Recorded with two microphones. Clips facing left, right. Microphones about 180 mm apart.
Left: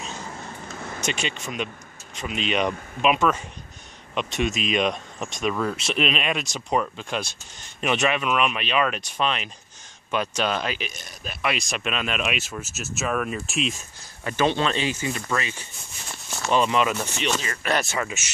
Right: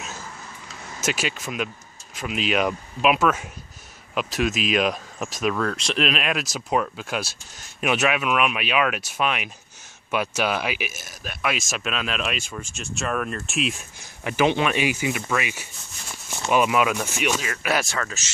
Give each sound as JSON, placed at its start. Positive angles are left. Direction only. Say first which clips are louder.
{"t": 0.6, "sound": "vehicle", "louder": "left 5 dB", "side_deg": 50}
{"t": 1.0, "sound": "speech", "louder": "right 3 dB", "side_deg": -5}
{"t": 14.2, "sound": "speech", "louder": "right 2 dB", "side_deg": -15}
{"t": 17.9, "sound": "speech", "louder": "left 2 dB", "side_deg": 15}